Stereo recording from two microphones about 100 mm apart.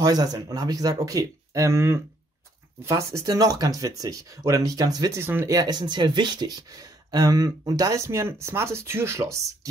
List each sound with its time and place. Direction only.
0.0 s speech: 40° right (ahead or behind)
5.2 s speech: 25° right (ahead or behind)
5.6 s speech: 45° right (ahead or behind)